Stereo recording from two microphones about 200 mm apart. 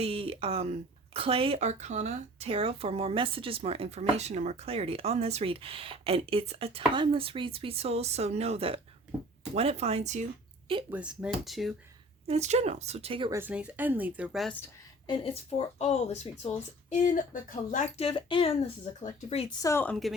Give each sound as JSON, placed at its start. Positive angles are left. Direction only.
{"t": 0.0, "sound": "speech", "side_deg": -30}
{"t": 10.9, "sound": "speech", "side_deg": -5}
{"t": 12.3, "sound": "speech", "side_deg": -35}
{"t": 13.3, "sound": "speech", "side_deg": -10}
{"t": 15.0, "sound": "speech", "side_deg": 30}
{"t": 19.6, "sound": "a woman's voice", "side_deg": 10}